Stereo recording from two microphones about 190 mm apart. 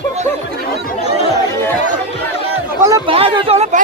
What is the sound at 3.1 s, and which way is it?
Speech, 30° right (ahead or behind).